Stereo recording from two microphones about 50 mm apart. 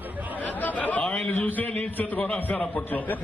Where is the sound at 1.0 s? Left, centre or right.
Centre.